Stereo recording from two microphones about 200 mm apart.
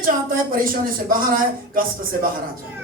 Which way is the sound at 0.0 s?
45° right (ahead or behind).